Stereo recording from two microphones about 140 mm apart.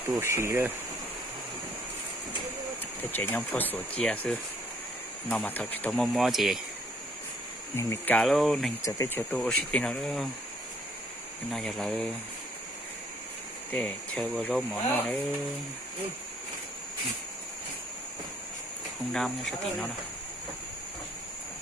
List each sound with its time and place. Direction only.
0.2 s speech: 20° right (ahead or behind)
3.0 s speech: 15° left (ahead or behind); by 6.6 s centre (ahead or behind)
7.8 s speech: 20° left (ahead or behind)
8.1 s speech: 5° left (ahead or behind)
8.8 s speech: 20° left (ahead or behind); by 10.2 s 5° left (ahead or behind)
11.5 s speech: centre (ahead or behind)
13.7 s speech: 10° left (ahead or behind)
19.1 s speech: centre (ahead or behind)